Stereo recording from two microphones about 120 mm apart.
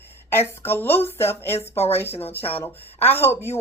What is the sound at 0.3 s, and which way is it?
Speech, 20° left (ahead or behind).